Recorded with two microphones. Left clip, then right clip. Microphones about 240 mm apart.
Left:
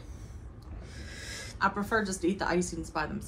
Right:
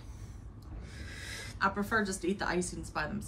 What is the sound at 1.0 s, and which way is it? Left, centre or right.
Wheeze, right.